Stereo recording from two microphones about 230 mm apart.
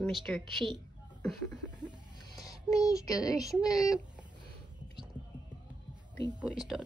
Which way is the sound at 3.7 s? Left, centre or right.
Centre.